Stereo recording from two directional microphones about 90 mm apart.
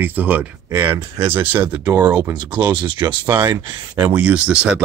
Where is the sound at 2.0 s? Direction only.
50° right (ahead or behind).